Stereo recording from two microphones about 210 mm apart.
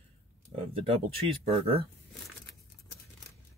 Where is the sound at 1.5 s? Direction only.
30° right (ahead or behind).